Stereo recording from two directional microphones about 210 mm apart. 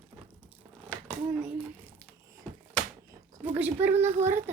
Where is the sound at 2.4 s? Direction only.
5° left (ahead or behind).